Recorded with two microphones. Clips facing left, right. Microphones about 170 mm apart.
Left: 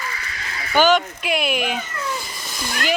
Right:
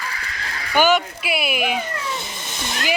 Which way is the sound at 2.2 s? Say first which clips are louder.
Right 1 dB; 25° right (ahead or behind).